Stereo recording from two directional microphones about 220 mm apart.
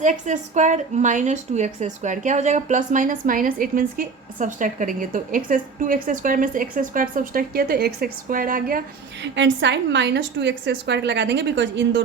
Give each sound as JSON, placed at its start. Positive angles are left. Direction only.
{"t": 0.0, "sound": "a woman's voice", "side_deg": -35}
{"t": 9.2, "sound": "a woman's voice", "side_deg": -55}